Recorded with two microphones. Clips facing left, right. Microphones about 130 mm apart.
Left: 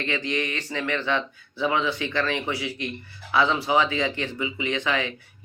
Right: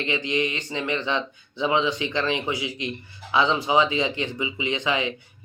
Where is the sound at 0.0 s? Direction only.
20° right (ahead or behind).